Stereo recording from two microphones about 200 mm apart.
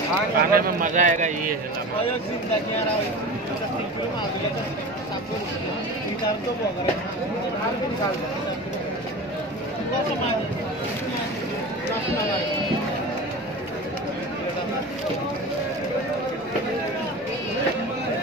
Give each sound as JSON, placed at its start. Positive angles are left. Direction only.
{"t": 0.4, "sound": "speech", "side_deg": -45}